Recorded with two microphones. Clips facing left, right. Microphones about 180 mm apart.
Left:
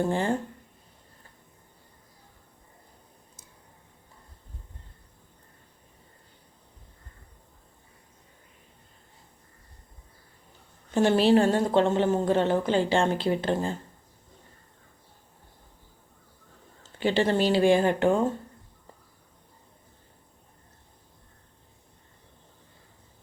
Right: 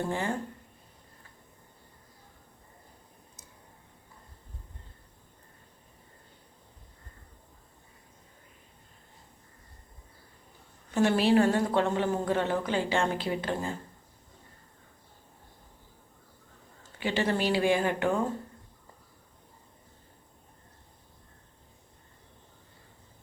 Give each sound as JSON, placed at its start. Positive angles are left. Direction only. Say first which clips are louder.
{"t": 0.0, "sound": "speech", "louder": "left 5 dB", "side_deg": 30}
{"t": 10.9, "sound": "speech", "louder": "left 3 dB", "side_deg": 30}
{"t": 17.0, "sound": "speech", "louder": "left 5 dB", "side_deg": 30}